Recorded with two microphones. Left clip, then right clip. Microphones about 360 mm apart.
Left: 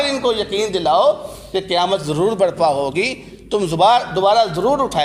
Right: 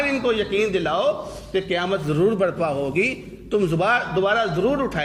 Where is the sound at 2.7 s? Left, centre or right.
Left.